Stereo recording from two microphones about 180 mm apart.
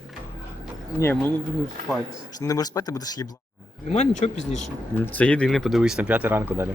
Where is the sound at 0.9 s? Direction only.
15° left (ahead or behind).